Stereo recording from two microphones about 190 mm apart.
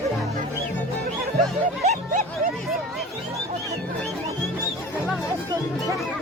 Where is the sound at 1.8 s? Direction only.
35° right (ahead or behind).